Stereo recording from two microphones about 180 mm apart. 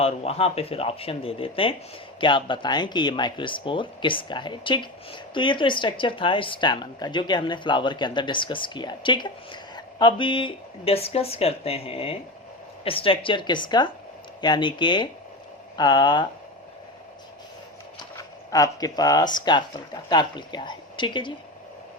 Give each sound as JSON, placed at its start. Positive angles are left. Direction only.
{"t": 0.0, "sound": "speech", "side_deg": 35}
{"t": 18.2, "sound": "speech", "side_deg": 20}